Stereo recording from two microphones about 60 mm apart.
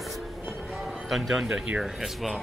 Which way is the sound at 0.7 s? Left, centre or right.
Centre.